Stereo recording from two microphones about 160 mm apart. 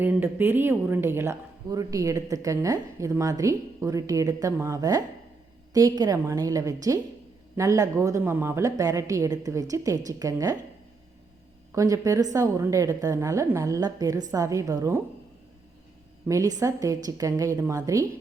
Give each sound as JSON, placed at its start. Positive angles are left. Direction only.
{"t": 0.0, "sound": "speech", "side_deg": -10}
{"t": 11.7, "sound": "speech", "side_deg": -20}
{"t": 16.3, "sound": "speech", "side_deg": -20}